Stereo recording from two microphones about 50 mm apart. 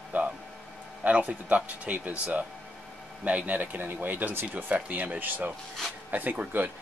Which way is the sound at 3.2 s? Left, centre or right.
Right.